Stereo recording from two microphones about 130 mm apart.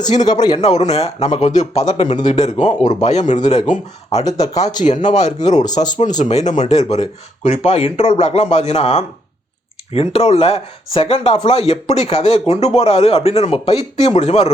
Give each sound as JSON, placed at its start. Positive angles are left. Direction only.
{"t": 0.0, "sound": "a man's voice", "side_deg": 65}
{"t": 0.3, "sound": "a man's voice", "side_deg": 30}
{"t": 0.6, "sound": "a man's voice", "side_deg": 55}
{"t": 4.2, "sound": "speech", "side_deg": 30}
{"t": 5.0, "sound": "a man's voice", "side_deg": 60}
{"t": 5.6, "sound": "a man's voice", "side_deg": 30}
{"t": 6.1, "sound": "a man's voice", "side_deg": 65}